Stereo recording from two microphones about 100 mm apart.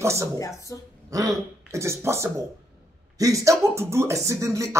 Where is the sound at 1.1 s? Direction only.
35° right (ahead or behind).